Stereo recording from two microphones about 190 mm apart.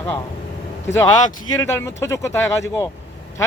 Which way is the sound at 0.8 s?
15° left (ahead or behind).